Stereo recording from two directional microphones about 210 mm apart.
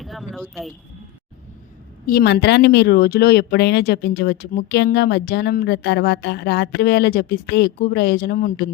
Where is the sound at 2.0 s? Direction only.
50° left (ahead or behind).